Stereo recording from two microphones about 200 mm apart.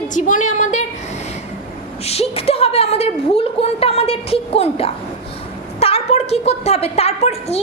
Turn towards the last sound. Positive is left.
turn(degrees=30)  # may be behind; listen again after turning